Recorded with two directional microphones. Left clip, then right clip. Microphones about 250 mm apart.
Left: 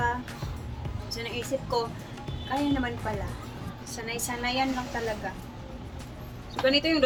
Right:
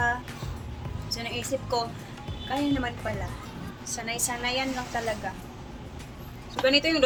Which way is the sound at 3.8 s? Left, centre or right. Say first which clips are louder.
Right 3 dB; centre.